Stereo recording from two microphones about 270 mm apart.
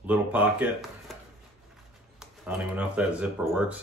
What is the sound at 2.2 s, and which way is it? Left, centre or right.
Speech, centre.